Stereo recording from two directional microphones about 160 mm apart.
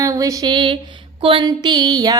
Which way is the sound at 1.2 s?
30° right (ahead or behind).